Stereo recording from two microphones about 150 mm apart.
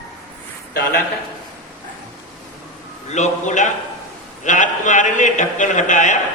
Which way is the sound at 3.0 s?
50° left (ahead or behind).